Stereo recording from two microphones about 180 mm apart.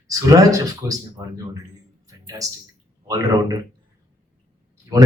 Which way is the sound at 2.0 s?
20° right (ahead or behind).